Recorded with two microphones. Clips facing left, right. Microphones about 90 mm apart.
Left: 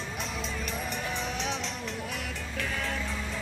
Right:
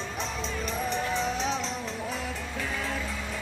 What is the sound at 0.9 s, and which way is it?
Music, 15° left (ahead or behind).